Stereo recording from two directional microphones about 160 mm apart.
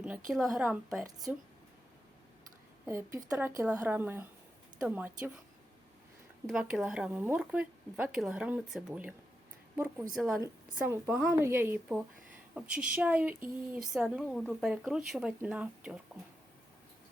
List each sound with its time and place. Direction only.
0.3 s speech: centre (ahead or behind)
2.8 s speech: 20° right (ahead or behind)
6.5 s speech: 5° right (ahead or behind)
10.2 s speech: 5° right (ahead or behind)
10.4 s speech: 15° right (ahead or behind)
11.0 s speech: 5° right (ahead or behind)
11.3 s speech: 15° right (ahead or behind)
14.3 s speech: 5° left (ahead or behind)